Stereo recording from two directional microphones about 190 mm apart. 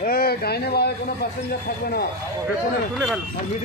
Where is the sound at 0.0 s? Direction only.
50° left (ahead or behind).